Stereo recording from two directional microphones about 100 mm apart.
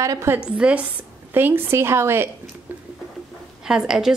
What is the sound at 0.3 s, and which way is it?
A woman's voice, 15° right (ahead or behind).